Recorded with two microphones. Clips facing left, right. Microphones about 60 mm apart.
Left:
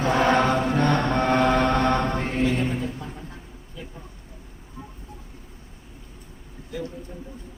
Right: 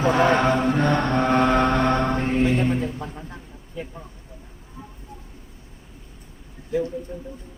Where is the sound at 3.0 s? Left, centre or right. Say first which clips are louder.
Right 2 dB; right.